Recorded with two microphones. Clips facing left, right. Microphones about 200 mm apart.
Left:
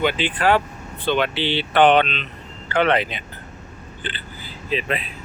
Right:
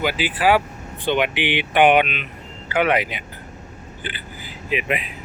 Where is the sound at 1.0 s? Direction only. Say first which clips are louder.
Even; 15° right (ahead or behind).